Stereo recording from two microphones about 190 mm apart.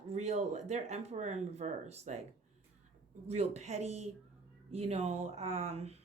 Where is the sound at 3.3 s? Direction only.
35° right (ahead or behind).